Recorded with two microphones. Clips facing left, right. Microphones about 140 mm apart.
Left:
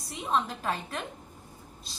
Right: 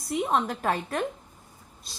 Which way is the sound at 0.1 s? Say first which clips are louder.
Right 4 dB; 60° right (ahead or behind).